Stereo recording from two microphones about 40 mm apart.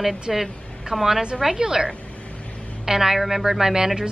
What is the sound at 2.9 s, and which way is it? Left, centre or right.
A woman's voice, centre.